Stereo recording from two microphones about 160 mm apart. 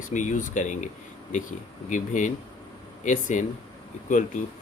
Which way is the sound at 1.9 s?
50° left (ahead or behind).